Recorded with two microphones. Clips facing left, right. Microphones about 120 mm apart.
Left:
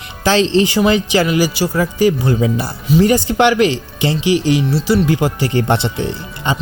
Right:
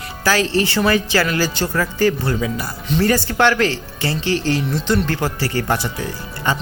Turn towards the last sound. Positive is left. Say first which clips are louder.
# left 2 dB
turn(degrees=25)  # may be behind; listen again after turning